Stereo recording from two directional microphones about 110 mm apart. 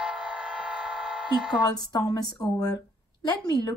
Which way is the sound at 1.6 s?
40° left (ahead or behind).